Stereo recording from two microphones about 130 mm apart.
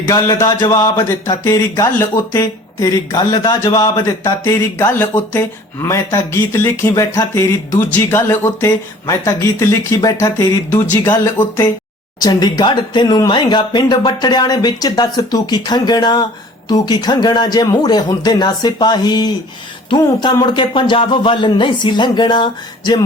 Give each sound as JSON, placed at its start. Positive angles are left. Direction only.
{"t": 0.1, "sound": "speech", "side_deg": 25}